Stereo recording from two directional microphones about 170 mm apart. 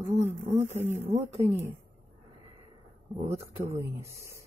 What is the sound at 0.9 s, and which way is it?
Speech, 35° right (ahead or behind).